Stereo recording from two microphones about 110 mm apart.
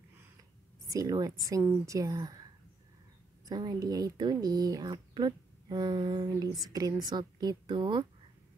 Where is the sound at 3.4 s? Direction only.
35° right (ahead or behind).